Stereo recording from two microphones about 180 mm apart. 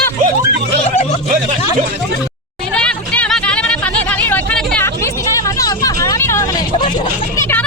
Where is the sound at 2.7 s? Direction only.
5° left (ahead or behind).